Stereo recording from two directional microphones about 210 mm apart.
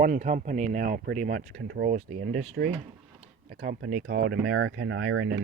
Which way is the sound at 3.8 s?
45° right (ahead or behind).